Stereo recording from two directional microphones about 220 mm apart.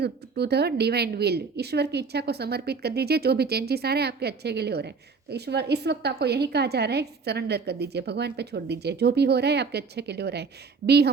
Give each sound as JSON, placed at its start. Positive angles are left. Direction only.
{"t": 0.0, "sound": "a woman's voice", "side_deg": -50}